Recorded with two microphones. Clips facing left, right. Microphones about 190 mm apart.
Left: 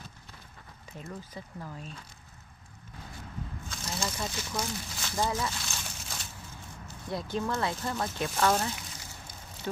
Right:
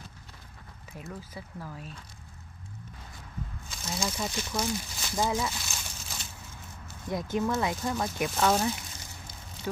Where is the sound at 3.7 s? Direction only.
5° right (ahead or behind).